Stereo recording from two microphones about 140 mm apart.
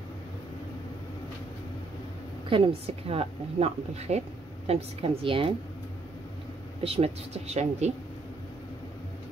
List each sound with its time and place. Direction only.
2.5 s a woman's voice: 40° right (ahead or behind)
6.8 s a woman's voice: 45° right (ahead or behind)